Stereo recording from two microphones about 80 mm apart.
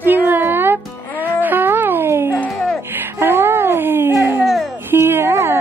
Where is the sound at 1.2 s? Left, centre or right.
Right.